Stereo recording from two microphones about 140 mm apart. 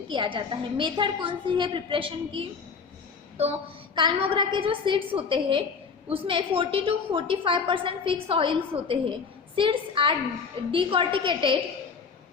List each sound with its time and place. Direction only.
0.1 s a woman's voice: 35° right (ahead or behind)
3.9 s a woman's voice: 35° right (ahead or behind)